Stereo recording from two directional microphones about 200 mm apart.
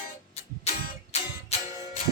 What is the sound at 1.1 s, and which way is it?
Music, 30° left (ahead or behind).